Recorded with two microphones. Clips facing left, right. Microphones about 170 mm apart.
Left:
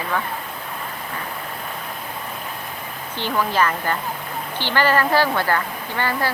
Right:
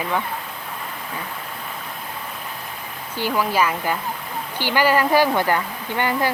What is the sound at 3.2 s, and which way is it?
Speech, 10° right (ahead or behind).